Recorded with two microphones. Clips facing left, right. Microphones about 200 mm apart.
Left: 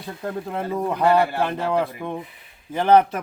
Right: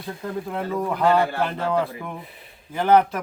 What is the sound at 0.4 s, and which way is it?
A man's voice, 20° left (ahead or behind).